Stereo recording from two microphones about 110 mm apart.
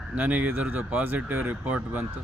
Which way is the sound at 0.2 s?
15° right (ahead or behind).